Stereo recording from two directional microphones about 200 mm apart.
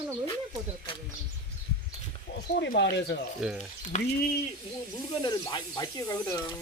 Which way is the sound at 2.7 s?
60° left (ahead or behind).